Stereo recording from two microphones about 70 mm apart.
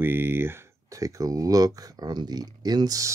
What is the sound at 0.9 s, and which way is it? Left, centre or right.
Speech, right.